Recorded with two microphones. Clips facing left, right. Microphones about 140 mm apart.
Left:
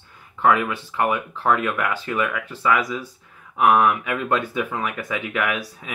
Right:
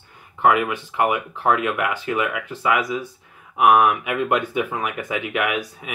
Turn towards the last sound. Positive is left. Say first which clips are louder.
# right 2 dB
turn(degrees=-15)  # may be behind; listen again after turning